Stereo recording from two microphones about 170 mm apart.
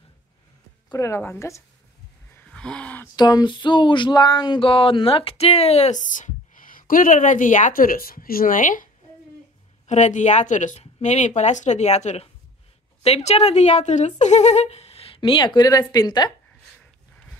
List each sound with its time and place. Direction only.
0.8 s speech: 20° left (ahead or behind)
2.3 s gasp: 5° left (ahead or behind)
3.2 s speech: 25° left (ahead or behind); by 8.8 s 50° left (ahead or behind)
9.8 s speech: 45° left (ahead or behind); by 16.3 s 25° left (ahead or behind)